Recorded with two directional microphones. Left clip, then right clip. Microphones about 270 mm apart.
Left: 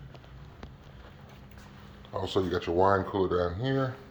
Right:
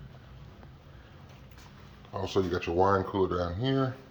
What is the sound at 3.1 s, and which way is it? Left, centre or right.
Speech, right.